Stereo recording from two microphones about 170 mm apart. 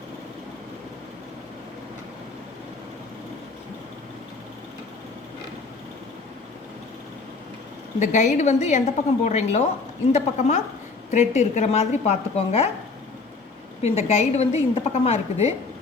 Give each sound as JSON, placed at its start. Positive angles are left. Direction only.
{"t": 7.9, "sound": "a woman's voice", "side_deg": 45}
{"t": 13.8, "sound": "a woman's voice", "side_deg": 35}